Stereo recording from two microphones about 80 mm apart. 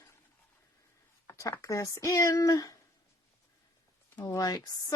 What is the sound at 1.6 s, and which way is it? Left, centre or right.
Speech, left.